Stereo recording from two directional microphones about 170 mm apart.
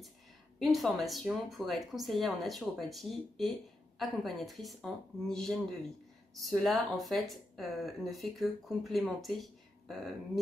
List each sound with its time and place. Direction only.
0.6 s speech: centre (ahead or behind)